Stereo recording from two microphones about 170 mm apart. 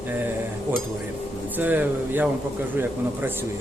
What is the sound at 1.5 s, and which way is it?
Speech, 10° right (ahead or behind).